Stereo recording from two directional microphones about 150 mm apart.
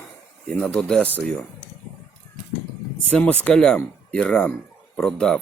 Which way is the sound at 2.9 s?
10° left (ahead or behind).